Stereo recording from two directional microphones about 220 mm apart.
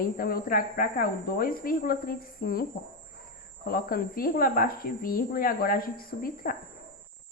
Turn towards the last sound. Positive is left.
turn(degrees=40)  # may be behind; listen again after turning